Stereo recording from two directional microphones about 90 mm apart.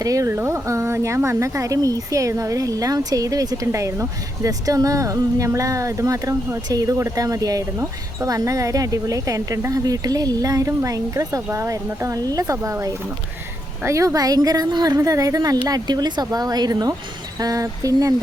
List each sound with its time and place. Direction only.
0.0 s a woman's voice: 40° right (ahead or behind)